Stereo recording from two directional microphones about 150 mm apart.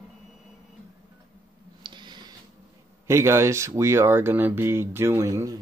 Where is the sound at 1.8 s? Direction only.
30° right (ahead or behind).